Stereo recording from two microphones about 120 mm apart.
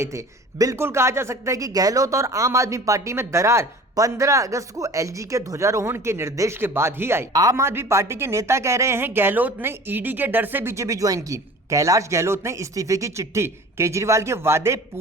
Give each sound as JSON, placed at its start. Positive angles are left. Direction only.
{"t": 0.0, "sound": "a woman's voice", "side_deg": -25}